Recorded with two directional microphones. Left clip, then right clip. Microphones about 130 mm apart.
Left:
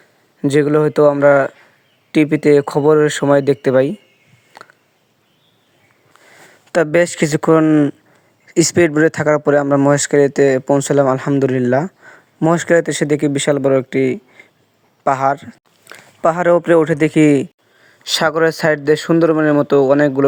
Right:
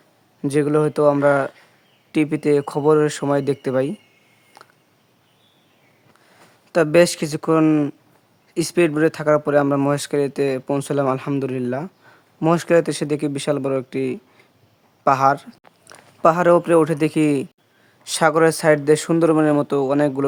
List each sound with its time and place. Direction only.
0.4 s speech: 30° left (ahead or behind)
6.7 s speech: 45° left (ahead or behind)
7.6 s speech: 25° left (ahead or behind)
8.4 s a man's voice: 45° left (ahead or behind); by 14.4 s 25° left (ahead or behind)
15.0 s a sound: 30° left (ahead or behind)
16.2 s a man's voice: 40° left (ahead or behind); by 20.2 s 15° left (ahead or behind)